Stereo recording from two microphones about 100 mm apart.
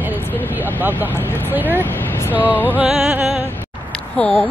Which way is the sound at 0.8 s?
20° right (ahead or behind).